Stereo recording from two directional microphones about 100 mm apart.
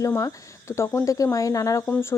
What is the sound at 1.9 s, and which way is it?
Speech, 20° left (ahead or behind).